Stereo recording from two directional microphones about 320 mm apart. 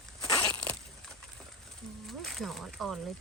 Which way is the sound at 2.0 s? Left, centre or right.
Centre.